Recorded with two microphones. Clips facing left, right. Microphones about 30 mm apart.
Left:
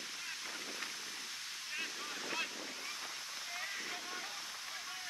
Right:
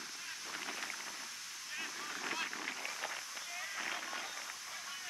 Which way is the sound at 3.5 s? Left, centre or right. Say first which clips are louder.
Left 1 dB; left.